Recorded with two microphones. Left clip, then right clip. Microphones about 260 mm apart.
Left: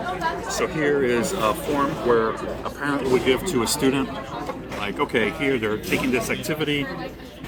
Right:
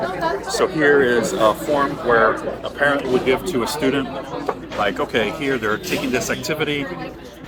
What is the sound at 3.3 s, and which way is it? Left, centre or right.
Speech, left.